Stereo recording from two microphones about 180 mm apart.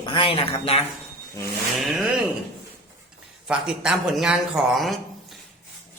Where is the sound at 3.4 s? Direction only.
5° right (ahead or behind).